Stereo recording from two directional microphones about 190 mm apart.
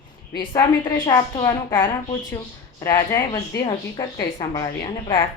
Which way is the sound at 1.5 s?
15° left (ahead or behind).